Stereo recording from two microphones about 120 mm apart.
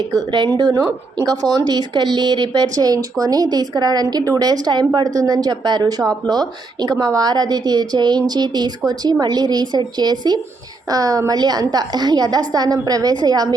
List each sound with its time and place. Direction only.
0.2 s speech: 40° right (ahead or behind)